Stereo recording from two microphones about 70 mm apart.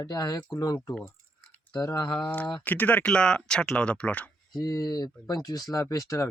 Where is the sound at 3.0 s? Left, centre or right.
Centre.